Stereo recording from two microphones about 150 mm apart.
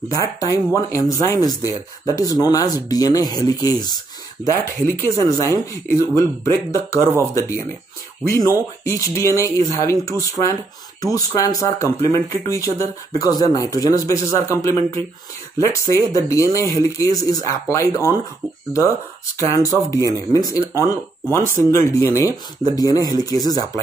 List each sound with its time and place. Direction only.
0.1 s speech: 20° left (ahead or behind)
19.4 s speech: 20° left (ahead or behind)
21.4 s speech: 60° right (ahead or behind)
21.6 s speech: 20° left (ahead or behind)